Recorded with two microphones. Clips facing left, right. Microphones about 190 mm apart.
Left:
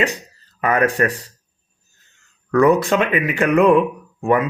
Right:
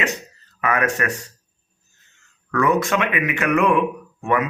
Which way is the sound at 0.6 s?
35° left (ahead or behind).